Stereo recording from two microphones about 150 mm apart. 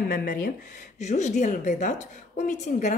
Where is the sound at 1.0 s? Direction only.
50° left (ahead or behind).